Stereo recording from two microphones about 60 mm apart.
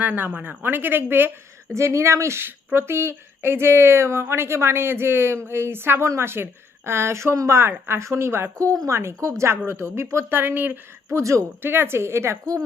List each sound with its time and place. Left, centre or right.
0.0 s speech: right
1.7 s speech: right
8.5 s speech: right
8.9 s speech: right
10.3 s speech: right
11.1 s speech: right
11.6 s speech: right